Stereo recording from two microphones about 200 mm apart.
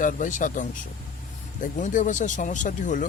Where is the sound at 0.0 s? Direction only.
40° left (ahead or behind).